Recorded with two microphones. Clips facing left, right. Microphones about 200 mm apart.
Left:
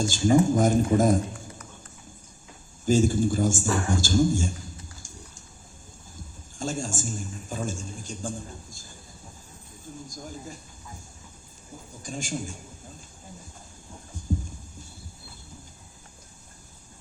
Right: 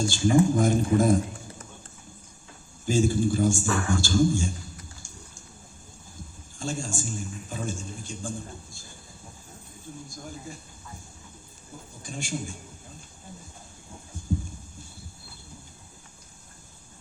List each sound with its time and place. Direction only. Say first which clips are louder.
0.0 s a man's voice: left 1 dB; 45° left (ahead or behind)
2.8 s a man's voice: left 2 dB; 45° left (ahead or behind)
6.6 s a man's voice: left 2 dB; 45° left (ahead or behind)
12.0 s a man's voice: left 2 dB; 40° left (ahead or behind)